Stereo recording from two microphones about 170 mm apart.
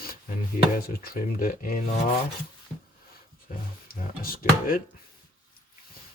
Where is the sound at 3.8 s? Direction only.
60° left (ahead or behind).